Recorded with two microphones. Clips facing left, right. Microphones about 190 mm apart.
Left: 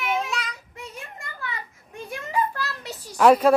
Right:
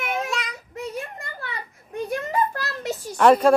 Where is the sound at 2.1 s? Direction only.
45° right (ahead or behind).